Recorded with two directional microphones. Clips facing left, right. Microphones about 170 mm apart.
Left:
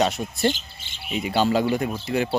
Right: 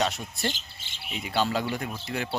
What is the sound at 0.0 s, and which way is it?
Speech, 15° left (ahead or behind).